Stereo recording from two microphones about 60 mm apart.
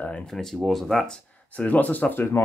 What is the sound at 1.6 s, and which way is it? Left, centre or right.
Speech, left.